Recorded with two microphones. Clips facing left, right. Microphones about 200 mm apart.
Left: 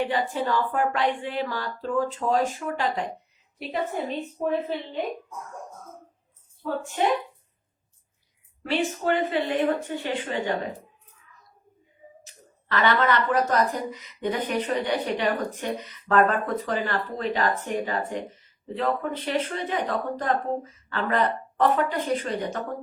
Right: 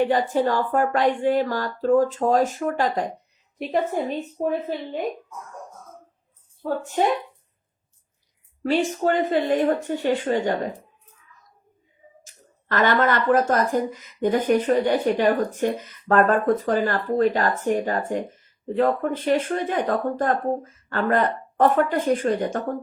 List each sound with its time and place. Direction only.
0.1 s a woman's voice: 45° right (ahead or behind)
6.6 s a woman's voice: 40° right (ahead or behind)
8.6 s a woman's voice: 40° right (ahead or behind)
12.2 s a sound: 45° right (ahead or behind)
13.5 s a woman's voice: 45° right (ahead or behind)